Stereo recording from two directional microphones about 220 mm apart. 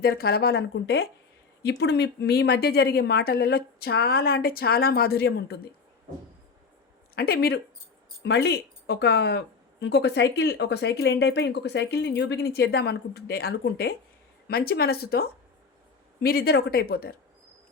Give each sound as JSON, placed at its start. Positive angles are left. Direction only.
{"t": 0.0, "sound": "speech", "side_deg": 45}
{"t": 7.2, "sound": "speech", "side_deg": 45}